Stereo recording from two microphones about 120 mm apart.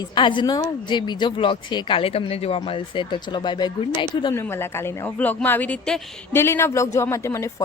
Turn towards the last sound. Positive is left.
turn(degrees=25)  # may be behind; listen again after turning